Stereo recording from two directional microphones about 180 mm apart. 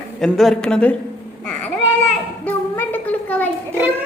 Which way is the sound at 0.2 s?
Centre (ahead or behind).